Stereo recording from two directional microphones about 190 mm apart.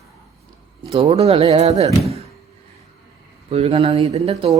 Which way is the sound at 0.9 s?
30° right (ahead or behind).